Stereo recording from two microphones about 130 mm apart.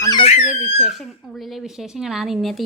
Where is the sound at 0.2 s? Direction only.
50° left (ahead or behind).